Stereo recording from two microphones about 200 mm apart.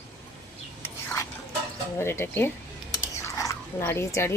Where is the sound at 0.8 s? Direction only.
10° left (ahead or behind).